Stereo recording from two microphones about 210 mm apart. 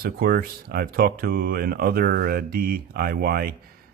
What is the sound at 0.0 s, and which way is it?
Speech, 45° right (ahead or behind).